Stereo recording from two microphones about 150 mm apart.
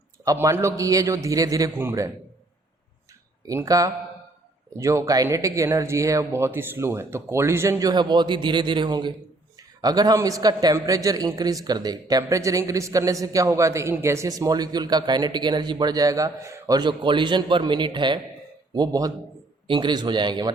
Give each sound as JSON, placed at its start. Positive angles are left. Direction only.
{"t": 0.3, "sound": "speech", "side_deg": -20}
{"t": 3.4, "sound": "a man's voice", "side_deg": -20}